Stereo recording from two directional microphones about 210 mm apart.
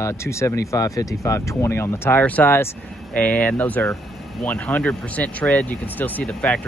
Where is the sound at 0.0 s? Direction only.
15° left (ahead or behind).